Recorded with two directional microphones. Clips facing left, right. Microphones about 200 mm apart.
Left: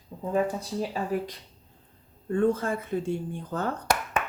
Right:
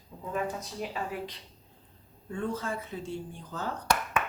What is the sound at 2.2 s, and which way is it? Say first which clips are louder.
Speech: left 9 dB; 55° left (ahead or behind).